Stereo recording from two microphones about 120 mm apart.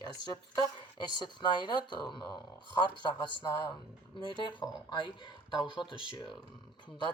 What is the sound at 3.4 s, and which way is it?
Speech, 30° left (ahead or behind).